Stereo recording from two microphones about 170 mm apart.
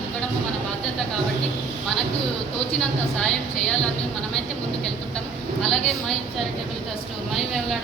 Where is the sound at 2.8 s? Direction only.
5° left (ahead or behind).